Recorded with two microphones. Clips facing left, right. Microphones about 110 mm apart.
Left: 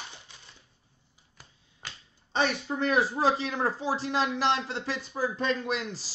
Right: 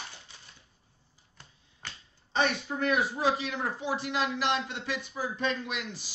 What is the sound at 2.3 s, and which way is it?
Speech, 25° left (ahead or behind).